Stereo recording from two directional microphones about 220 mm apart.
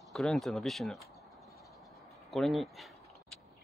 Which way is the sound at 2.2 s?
Centre (ahead or behind).